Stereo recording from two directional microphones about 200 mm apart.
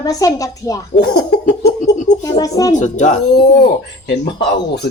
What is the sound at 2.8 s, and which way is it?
Speech, 40° left (ahead or behind).